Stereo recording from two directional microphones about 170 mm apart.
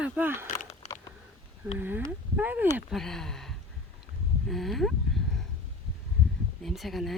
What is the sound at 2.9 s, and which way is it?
Speech, centre (ahead or behind).